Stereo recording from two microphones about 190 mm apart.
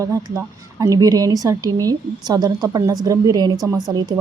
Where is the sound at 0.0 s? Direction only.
15° right (ahead or behind).